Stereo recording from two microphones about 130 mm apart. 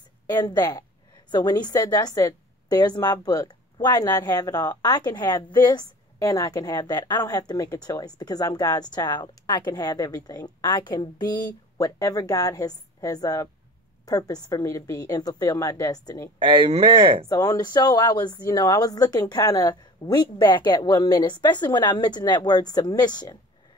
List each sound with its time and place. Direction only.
0.3 s a woman's voice: 30° left (ahead or behind)
16.3 s speech: 40° right (ahead or behind)
17.3 s speech: 30° left (ahead or behind)